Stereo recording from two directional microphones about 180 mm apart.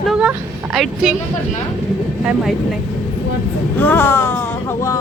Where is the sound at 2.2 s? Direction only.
Centre (ahead or behind).